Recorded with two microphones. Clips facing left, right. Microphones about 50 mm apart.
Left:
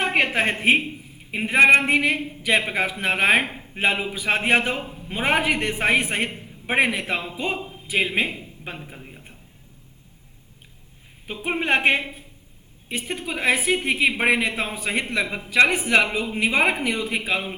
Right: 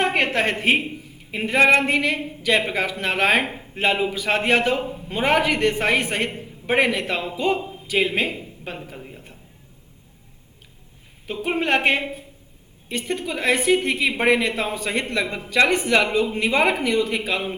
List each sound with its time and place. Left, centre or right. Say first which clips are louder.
0.1 s a woman's voice: even; centre
11.3 s a woman's voice: right 1 dB; left
12.9 s a woman's voice: right 2 dB; centre